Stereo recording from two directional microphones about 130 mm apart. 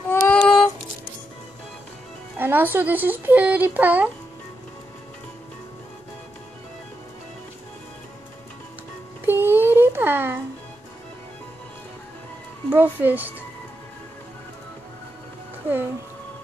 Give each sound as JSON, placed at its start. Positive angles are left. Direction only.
{"t": 0.1, "sound": "music", "side_deg": 5}
{"t": 2.3, "sound": "speech", "side_deg": -15}
{"t": 9.2, "sound": "a sound", "side_deg": -15}
{"t": 12.6, "sound": "speech", "side_deg": -15}